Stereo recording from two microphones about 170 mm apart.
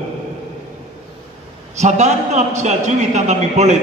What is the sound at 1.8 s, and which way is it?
A man's voice, 45° right (ahead or behind).